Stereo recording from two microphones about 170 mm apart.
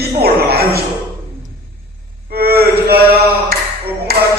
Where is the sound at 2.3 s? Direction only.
65° right (ahead or behind).